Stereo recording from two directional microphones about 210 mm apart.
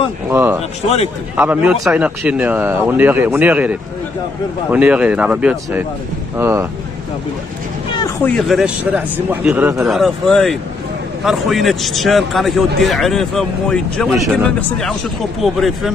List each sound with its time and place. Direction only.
0.3 s a man's voice: 10° right (ahead or behind)
0.8 s a man's voice: 30° left (ahead or behind)
1.3 s a man's voice: 5° right (ahead or behind)
8.2 s a man's voice: centre (ahead or behind)
15.4 s a man's voice: centre (ahead or behind)